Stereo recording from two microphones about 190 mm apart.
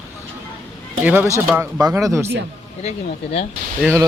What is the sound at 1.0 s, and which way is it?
Speech, 10° right (ahead or behind).